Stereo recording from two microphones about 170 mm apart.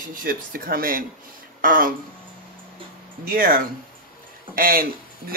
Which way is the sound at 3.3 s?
55° right (ahead or behind).